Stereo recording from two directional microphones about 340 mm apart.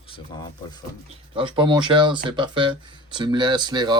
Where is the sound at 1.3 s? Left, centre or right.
Centre.